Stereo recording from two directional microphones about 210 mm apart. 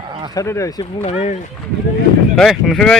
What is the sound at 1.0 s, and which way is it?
Speech, 30° left (ahead or behind).